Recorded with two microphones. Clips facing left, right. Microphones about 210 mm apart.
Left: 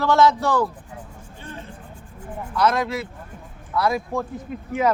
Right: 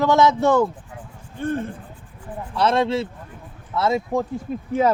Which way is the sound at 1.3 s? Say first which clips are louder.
Right 14 dB; 55° right (ahead or behind).